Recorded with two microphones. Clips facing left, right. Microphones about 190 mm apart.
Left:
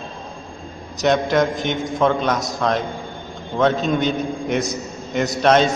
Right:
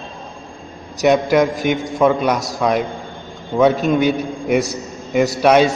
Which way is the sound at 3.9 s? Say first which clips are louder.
Right 4 dB; 5° right (ahead or behind).